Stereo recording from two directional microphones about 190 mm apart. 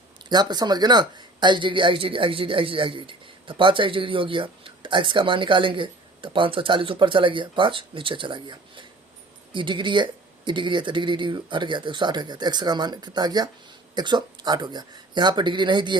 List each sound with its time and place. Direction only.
0.3 s speech: 20° right (ahead or behind)